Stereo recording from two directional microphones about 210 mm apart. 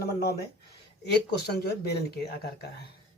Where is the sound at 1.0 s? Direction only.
50° left (ahead or behind).